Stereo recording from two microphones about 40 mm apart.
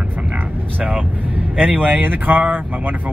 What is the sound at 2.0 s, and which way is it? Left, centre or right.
Speech, right.